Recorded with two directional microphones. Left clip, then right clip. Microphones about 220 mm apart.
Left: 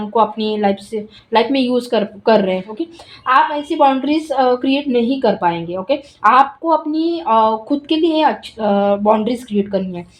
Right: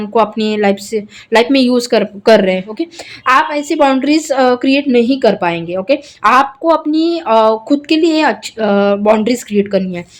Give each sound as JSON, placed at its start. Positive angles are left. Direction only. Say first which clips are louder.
{"t": 0.0, "sound": "a woman's voice", "louder": "right 3 dB", "side_deg": -25}